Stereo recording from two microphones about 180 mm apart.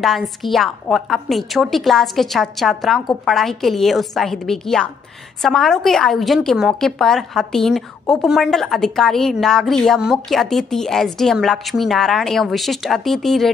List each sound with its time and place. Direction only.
0.0 s a woman's voice: centre (ahead or behind)